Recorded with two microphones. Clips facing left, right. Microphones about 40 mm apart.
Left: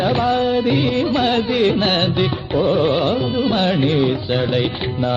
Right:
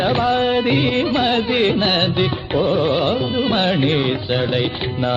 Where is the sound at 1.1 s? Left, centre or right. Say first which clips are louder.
Even; centre.